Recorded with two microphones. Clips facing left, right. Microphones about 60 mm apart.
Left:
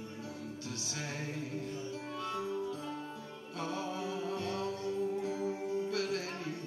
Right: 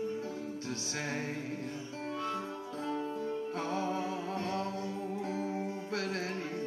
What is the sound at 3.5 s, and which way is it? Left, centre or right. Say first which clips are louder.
Music: even; right.